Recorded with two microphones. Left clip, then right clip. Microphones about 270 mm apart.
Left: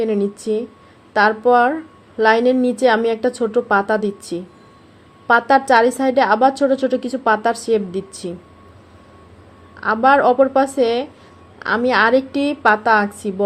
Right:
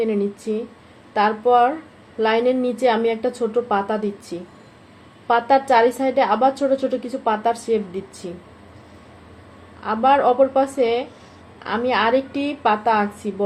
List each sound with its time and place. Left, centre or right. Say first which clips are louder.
0.0 s a woman's voice: left 2 dB; left
9.8 s a woman's voice: left 3 dB; left